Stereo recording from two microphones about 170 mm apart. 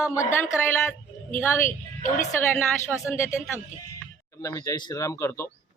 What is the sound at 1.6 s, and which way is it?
Speech, 50° left (ahead or behind).